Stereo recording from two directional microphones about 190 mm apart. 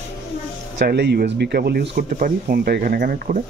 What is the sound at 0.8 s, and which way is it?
Speech, 60° right (ahead or behind).